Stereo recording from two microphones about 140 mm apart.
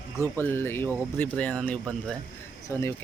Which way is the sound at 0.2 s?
15° left (ahead or behind).